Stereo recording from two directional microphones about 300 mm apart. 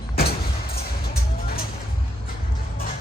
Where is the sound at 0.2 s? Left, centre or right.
Left.